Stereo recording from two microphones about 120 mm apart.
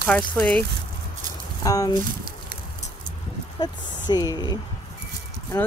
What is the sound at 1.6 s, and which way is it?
Speech, 30° left (ahead or behind).